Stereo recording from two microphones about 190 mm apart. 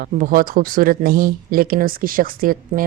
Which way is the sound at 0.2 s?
45° right (ahead or behind).